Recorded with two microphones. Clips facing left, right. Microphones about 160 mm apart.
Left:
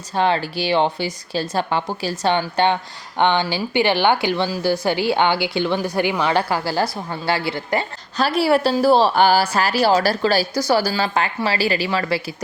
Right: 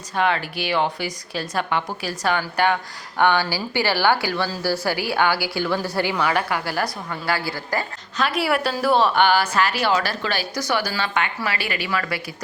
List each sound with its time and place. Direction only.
0.1 s speech: 30° left (ahead or behind)